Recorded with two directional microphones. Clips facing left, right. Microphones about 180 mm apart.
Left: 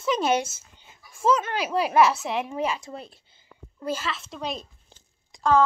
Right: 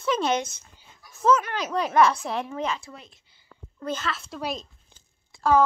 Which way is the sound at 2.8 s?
35° left (ahead or behind).